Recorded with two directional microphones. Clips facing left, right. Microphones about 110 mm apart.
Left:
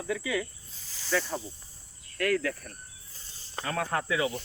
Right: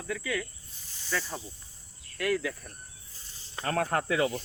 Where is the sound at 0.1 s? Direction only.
15° left (ahead or behind).